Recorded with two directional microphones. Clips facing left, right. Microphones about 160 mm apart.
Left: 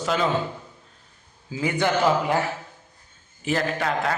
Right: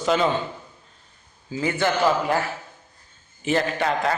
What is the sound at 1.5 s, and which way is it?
Speech, 10° left (ahead or behind).